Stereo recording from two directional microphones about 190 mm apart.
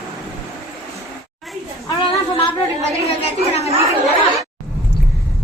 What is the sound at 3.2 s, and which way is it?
Speech, 35° left (ahead or behind).